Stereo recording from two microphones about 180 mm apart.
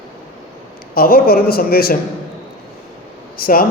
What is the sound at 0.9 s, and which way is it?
A man's voice, 55° left (ahead or behind).